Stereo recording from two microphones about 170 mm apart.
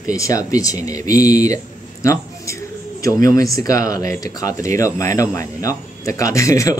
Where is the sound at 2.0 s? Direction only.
20° left (ahead or behind).